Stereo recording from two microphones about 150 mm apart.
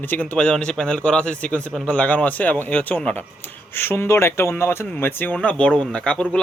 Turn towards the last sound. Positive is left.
turn(degrees=5)  # may be behind; listen again after turning